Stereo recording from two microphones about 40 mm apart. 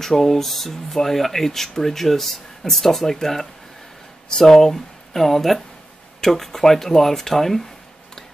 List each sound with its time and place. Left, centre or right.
0.0 s speech: centre